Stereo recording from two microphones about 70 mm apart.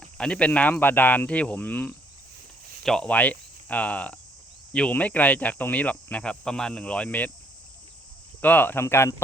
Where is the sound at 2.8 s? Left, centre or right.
Centre.